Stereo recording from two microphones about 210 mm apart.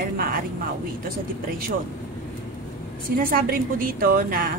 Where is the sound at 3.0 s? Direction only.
40° right (ahead or behind).